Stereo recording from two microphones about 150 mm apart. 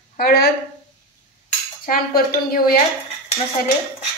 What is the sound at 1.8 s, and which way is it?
Speech, 80° left.